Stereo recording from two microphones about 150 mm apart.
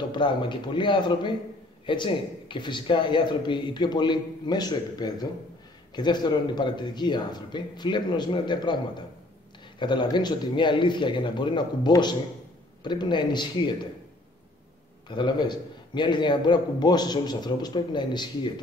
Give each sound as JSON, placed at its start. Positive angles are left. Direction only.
{"t": 0.1, "sound": "a man's voice", "side_deg": 30}
{"t": 9.8, "sound": "a man's voice", "side_deg": 30}
{"t": 15.0, "sound": "a man's voice", "side_deg": 30}